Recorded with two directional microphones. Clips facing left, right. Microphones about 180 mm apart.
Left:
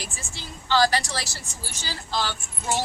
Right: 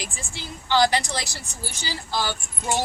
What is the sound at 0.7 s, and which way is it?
A woman's voice, 15° right (ahead or behind).